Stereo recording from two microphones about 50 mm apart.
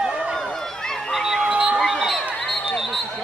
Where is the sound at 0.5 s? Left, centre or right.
Centre.